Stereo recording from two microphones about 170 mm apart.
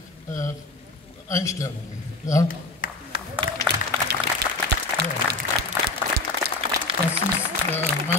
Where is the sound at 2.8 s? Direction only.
55° left (ahead or behind).